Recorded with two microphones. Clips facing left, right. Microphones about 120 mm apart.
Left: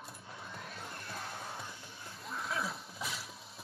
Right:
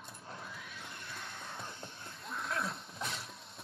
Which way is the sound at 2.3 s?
Centre (ahead or behind).